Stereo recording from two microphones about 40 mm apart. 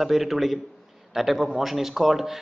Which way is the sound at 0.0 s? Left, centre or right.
Centre.